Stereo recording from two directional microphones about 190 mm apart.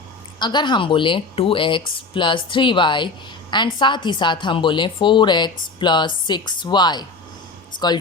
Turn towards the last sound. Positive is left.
turn(degrees=20)  # may be behind; listen again after turning